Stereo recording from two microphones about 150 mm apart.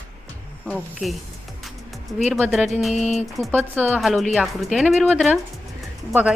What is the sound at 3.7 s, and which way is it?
Speech, 10° right (ahead or behind).